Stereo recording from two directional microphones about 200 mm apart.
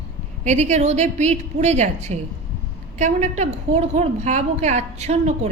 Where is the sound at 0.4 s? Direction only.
35° right (ahead or behind).